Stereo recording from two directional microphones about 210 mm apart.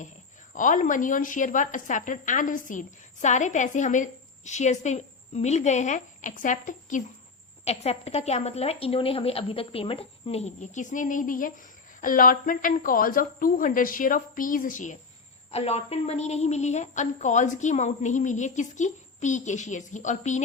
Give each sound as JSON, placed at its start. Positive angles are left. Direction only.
{"t": 0.5, "sound": "a woman's voice", "side_deg": 40}